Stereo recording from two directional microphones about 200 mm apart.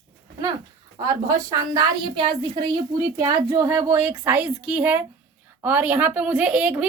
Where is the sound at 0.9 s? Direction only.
20° right (ahead or behind).